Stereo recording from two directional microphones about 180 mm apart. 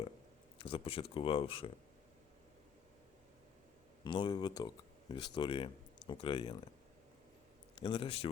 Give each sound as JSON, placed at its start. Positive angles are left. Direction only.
{"t": 0.6, "sound": "speech", "side_deg": 30}
{"t": 4.0, "sound": "speech", "side_deg": 25}
{"t": 7.8, "sound": "a man's voice", "side_deg": 30}